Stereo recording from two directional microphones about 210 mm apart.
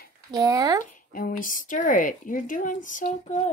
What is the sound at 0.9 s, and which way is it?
A woman's voice, 40° left (ahead or behind).